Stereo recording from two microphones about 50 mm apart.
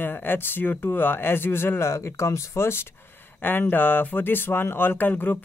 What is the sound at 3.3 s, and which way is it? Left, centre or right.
Speech, left.